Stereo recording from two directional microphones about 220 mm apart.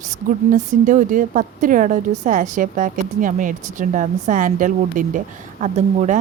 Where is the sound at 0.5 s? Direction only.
35° right (ahead or behind).